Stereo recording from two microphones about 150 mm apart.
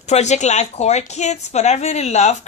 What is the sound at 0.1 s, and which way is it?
Speech, 50° left (ahead or behind).